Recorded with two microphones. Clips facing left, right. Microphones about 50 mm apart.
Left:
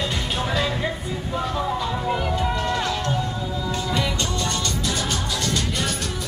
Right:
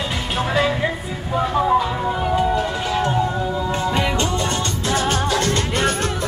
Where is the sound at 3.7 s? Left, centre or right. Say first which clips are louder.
Right 2 dB; right.